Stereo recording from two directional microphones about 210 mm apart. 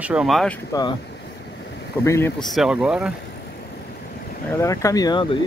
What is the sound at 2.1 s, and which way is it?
Speech, 15° left (ahead or behind).